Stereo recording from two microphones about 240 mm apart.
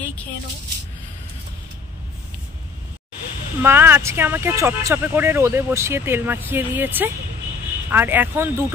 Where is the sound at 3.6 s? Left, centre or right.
Centre.